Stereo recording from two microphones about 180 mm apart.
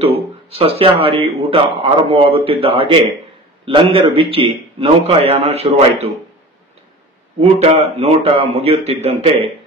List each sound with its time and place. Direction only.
0.0 s a man's voice: 35° right (ahead or behind)
7.3 s a man's voice: 35° right (ahead or behind)